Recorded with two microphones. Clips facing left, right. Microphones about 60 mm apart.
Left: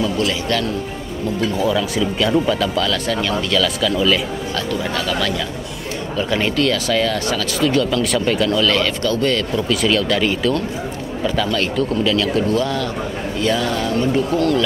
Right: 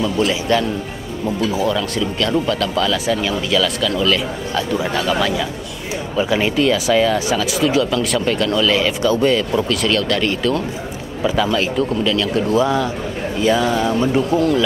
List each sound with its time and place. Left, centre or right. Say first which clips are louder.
0.2 s speech: right 3 dB; centre
1.5 s speech: even; centre
4.6 s speech: right 4 dB; centre
9.7 s speech: left 1 dB; centre
12.4 s speech: right 3 dB; centre